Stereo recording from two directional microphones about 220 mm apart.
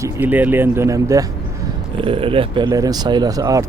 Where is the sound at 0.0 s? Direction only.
10° right (ahead or behind).